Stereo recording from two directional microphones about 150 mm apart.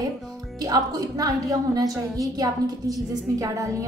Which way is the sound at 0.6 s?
25° right (ahead or behind).